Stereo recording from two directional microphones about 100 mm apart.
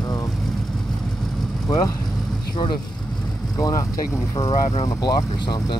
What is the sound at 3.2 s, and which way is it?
Vehicle, centre (ahead or behind).